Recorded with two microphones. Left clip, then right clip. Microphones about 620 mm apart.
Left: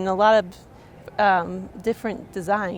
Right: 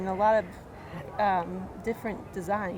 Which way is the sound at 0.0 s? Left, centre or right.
Left.